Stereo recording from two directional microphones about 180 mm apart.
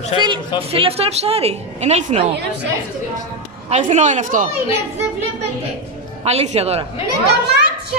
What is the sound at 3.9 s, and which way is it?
Speech, 40° right (ahead or behind).